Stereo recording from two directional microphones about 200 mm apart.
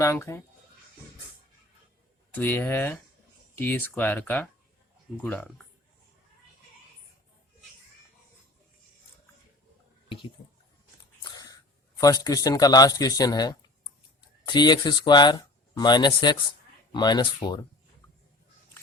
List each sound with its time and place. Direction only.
0.0 s speech: 15° left (ahead or behind)
2.3 s speech: 10° left (ahead or behind)
11.2 s speech: 20° left (ahead or behind)